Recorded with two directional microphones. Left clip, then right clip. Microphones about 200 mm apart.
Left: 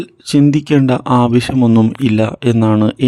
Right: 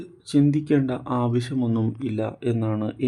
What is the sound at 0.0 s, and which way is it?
Speech, 35° left (ahead or behind).